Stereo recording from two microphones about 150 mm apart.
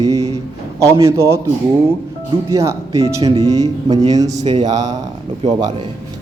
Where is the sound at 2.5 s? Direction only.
20° right (ahead or behind).